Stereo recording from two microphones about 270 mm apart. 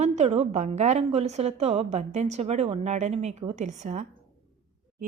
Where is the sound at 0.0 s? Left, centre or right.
Right.